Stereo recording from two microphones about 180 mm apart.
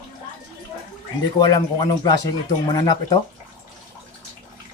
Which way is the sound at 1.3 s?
25° left (ahead or behind).